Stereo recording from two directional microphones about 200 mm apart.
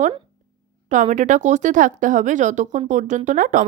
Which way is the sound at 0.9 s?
40° right (ahead or behind).